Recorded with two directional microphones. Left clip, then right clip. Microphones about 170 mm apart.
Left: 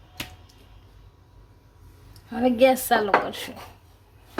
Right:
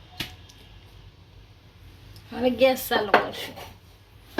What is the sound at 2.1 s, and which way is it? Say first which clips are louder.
Speech: left 1 dB; 50° left (ahead or behind).